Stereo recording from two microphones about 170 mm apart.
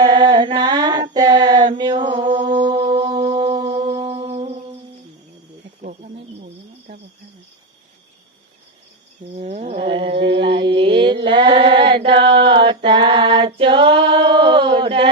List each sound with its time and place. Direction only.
0.0 s female singing: 25° right (ahead or behind)
1.8 s music: 30° right (ahead or behind)
9.3 s a sound: 40° right (ahead or behind)
10.2 s mantra: 90° right
10.8 s mantra: 30° right (ahead or behind)
12.5 s female singing: 30° right (ahead or behind)